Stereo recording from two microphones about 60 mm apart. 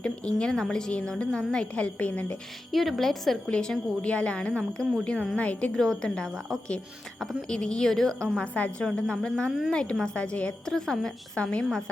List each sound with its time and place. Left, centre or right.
0.0 s a woman's voice: centre
2.7 s a woman's voice: centre
3.5 s a woman's voice: centre
5.7 s a woman's voice: centre
7.4 s a woman's voice: centre
11.4 s a woman's voice: left